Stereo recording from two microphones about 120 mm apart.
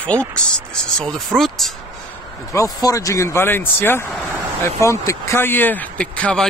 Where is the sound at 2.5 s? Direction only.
30° left (ahead or behind).